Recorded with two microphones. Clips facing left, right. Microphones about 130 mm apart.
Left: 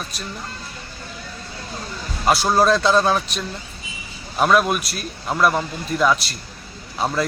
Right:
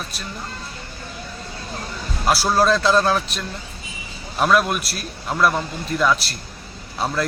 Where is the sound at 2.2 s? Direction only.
Centre (ahead or behind).